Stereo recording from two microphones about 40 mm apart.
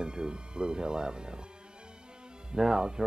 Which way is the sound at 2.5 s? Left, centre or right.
Centre.